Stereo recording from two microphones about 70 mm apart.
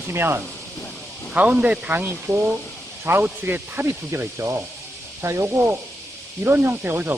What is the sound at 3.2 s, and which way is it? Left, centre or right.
Speech, right.